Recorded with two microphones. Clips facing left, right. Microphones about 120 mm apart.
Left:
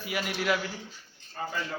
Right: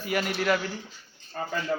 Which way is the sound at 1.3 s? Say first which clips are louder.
Right 2 dB; 65° right (ahead or behind).